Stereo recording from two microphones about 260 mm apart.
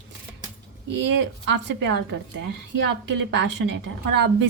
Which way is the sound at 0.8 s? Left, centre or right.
Right.